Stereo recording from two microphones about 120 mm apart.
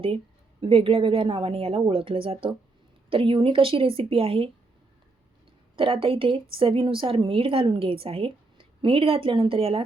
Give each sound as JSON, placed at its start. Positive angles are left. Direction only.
{"t": 0.6, "sound": "a woman's voice", "side_deg": -50}
{"t": 5.7, "sound": "a woman's voice", "side_deg": -50}